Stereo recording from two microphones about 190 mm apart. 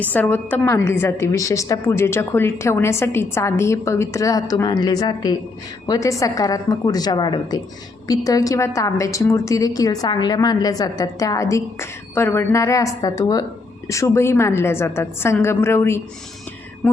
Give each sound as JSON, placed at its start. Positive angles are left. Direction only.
{"t": 0.0, "sound": "a woman's voice", "side_deg": 10}